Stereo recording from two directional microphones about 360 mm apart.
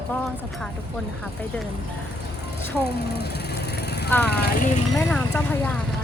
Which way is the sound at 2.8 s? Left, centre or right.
Left.